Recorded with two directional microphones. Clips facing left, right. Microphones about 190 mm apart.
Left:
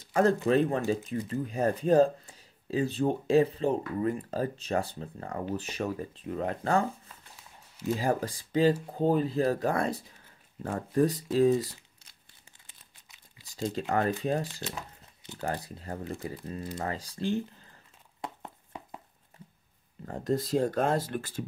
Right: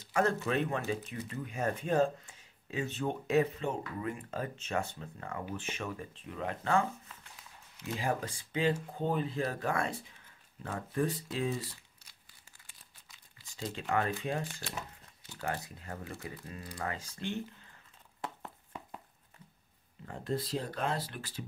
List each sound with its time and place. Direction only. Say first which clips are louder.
0.1 s speech: left 6 dB; 35° left (ahead or behind)
12.6 s crumpling: left 1 dB; 20° left (ahead or behind)
13.5 s speech: left 5 dB; 40° left (ahead or behind)
18.2 s a sound: left 2 dB; 20° left (ahead or behind)
20.1 s speech: left 7 dB; 45° left (ahead or behind)